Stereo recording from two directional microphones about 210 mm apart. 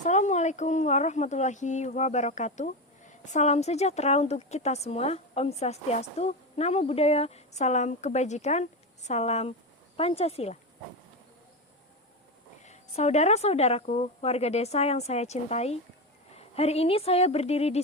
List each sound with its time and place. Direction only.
0.0 s speech: 35° left (ahead or behind)
12.6 s speech: 30° left (ahead or behind)